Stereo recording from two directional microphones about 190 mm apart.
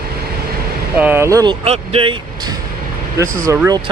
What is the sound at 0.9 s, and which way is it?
Speech, 10° right (ahead or behind).